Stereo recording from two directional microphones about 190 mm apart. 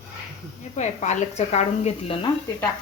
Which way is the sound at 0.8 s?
35° left (ahead or behind).